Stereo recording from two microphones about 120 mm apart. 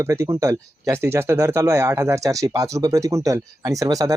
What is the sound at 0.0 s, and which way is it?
Speech, 25° right (ahead or behind).